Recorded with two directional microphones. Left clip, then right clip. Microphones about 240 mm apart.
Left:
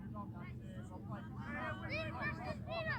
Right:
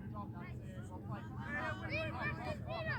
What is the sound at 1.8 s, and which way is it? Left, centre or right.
Vehicle, left.